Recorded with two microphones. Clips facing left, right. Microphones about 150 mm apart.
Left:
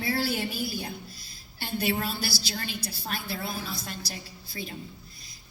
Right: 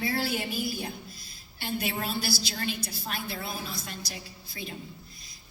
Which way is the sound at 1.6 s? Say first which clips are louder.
Left 3 dB; 35° left (ahead or behind).